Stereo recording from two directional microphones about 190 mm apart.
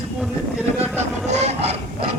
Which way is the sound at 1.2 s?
35° right (ahead or behind).